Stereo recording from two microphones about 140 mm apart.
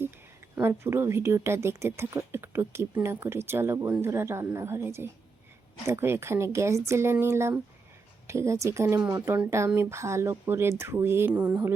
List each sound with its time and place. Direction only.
0.5 s speech: 20° right (ahead or behind)